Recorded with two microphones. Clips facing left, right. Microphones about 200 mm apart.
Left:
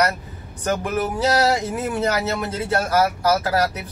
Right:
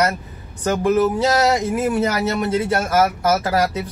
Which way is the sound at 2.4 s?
25° right (ahead or behind).